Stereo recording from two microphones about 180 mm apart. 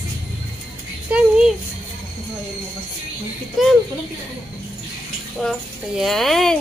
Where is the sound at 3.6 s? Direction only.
Centre (ahead or behind).